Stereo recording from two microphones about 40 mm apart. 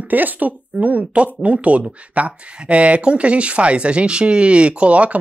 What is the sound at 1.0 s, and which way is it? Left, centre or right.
Speech, right.